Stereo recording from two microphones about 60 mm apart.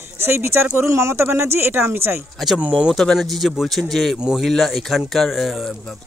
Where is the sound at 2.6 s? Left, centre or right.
Right.